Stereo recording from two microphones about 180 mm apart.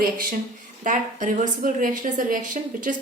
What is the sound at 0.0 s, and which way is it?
A woman's voice, 50° right (ahead or behind).